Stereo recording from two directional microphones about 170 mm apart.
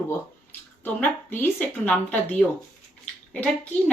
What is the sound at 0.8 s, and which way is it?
A woman's voice, 10° left (ahead or behind).